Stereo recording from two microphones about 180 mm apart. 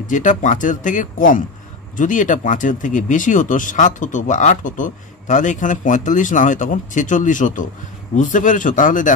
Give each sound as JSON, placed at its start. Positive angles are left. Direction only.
{"t": 0.0, "sound": "speech", "side_deg": 45}